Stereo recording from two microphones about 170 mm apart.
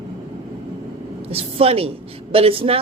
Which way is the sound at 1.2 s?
35° right (ahead or behind).